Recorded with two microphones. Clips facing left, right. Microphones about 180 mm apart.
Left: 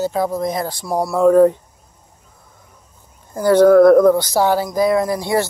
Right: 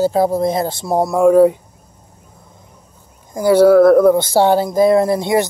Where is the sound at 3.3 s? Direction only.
10° right (ahead or behind).